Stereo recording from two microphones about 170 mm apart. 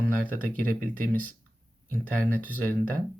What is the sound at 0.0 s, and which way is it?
Speech, 10° left (ahead or behind).